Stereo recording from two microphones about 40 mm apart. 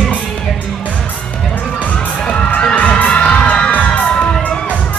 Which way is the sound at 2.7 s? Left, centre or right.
Left.